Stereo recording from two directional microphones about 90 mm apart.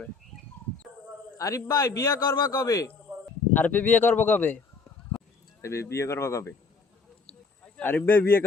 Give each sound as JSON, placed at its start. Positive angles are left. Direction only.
{"t": 1.4, "sound": "a man's voice", "side_deg": 40}
{"t": 3.5, "sound": "speech", "side_deg": 20}
{"t": 5.6, "sound": "a man's voice", "side_deg": 30}
{"t": 7.6, "sound": "a man's voice", "side_deg": 15}